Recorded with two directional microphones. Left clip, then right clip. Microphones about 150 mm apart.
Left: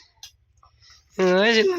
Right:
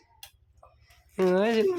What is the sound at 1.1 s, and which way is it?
Speech, 5° left (ahead or behind).